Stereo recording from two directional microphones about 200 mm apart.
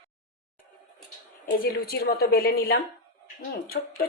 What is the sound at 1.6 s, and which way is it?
A woman's voice, 50° left (ahead or behind).